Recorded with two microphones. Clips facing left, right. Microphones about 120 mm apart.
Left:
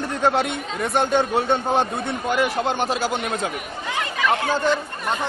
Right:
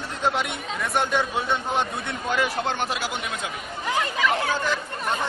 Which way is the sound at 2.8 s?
35° left (ahead or behind).